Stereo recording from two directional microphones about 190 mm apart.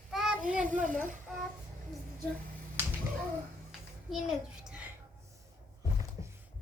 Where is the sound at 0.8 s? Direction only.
45° right (ahead or behind).